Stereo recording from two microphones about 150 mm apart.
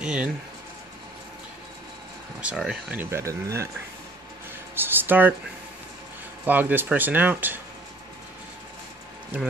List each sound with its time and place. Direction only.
0.0 s speech: 5° right (ahead or behind)
2.4 s speech: 5° right (ahead or behind)
3.0 s speech: 15° right (ahead or behind)
4.7 s speech: 15° right (ahead or behind)
6.4 s speech: 10° right (ahead or behind)